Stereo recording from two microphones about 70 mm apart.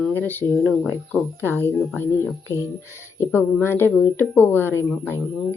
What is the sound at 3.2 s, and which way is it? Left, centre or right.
A woman's voice, left.